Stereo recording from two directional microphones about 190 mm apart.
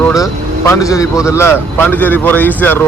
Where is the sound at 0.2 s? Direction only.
15° left (ahead or behind).